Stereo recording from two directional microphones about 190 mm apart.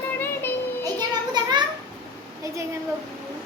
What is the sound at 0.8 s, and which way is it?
Children playing, 20° right (ahead or behind).